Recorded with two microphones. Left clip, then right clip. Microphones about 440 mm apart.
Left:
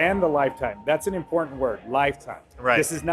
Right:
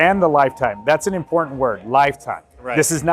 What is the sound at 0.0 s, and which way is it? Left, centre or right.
A man's voice, right.